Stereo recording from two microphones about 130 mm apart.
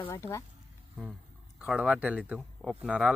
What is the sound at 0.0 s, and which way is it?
Speech, 20° left (ahead or behind).